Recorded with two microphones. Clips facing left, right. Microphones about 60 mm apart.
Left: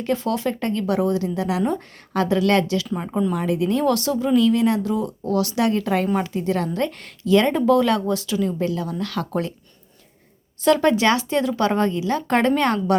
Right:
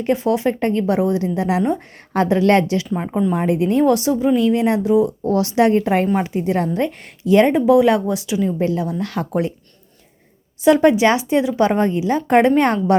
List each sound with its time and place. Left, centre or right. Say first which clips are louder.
0.0 s speech: right 5 dB; right
10.6 s speech: right 4 dB; centre